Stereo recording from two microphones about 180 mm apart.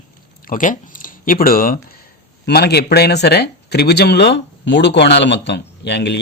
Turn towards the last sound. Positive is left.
turn(degrees=70)  # may be behind; listen again after turning